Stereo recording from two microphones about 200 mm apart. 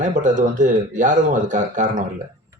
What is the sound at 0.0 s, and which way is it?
A man's voice, 40° right (ahead or behind).